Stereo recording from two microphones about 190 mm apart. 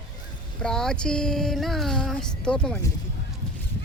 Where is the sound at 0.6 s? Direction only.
5° left (ahead or behind).